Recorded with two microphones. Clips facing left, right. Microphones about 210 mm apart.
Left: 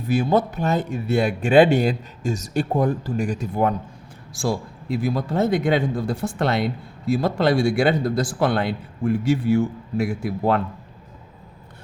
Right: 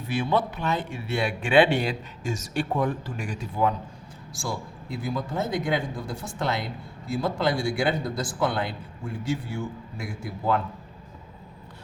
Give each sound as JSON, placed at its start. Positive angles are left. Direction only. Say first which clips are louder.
{"t": 0.1, "sound": "speech", "louder": "left 6 dB", "side_deg": 40}
{"t": 4.4, "sound": "speech", "louder": "left 8 dB", "side_deg": 70}